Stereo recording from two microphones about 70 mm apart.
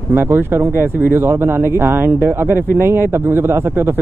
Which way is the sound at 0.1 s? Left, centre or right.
Right.